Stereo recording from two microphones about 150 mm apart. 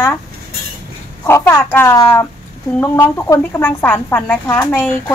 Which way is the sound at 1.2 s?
15° left (ahead or behind).